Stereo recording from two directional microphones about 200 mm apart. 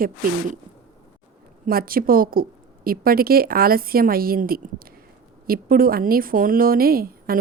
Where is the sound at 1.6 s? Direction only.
45° right (ahead or behind).